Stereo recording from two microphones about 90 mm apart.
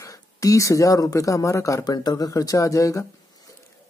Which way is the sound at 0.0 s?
40° left (ahead or behind).